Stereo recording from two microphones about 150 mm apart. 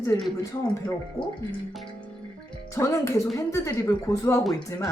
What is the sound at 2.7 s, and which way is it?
A woman's voice, 20° left (ahead or behind).